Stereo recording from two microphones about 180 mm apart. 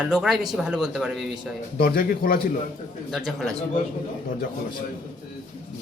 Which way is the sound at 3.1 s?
Centre (ahead or behind).